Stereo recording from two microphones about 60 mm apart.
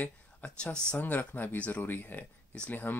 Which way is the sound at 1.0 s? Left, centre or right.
Left.